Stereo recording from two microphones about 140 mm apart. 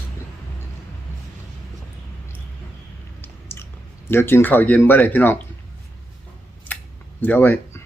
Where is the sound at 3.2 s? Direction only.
15° left (ahead or behind).